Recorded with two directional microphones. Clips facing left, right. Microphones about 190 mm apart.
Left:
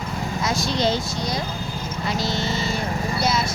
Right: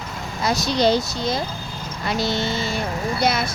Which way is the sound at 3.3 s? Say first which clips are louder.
Right 1 dB; 60° right (ahead or behind).